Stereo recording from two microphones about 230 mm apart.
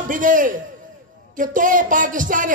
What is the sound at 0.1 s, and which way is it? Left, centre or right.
Speech, right.